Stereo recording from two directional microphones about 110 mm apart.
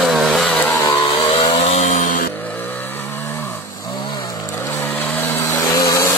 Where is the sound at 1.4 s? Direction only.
65° left (ahead or behind); by 2.0 s 90° left.